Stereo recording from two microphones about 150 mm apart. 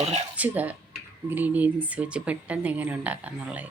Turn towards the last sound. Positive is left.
turn(degrees=-10)  # may be behind; listen again after turning